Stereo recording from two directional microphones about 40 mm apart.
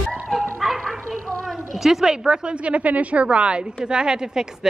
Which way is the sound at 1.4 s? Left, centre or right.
Centre.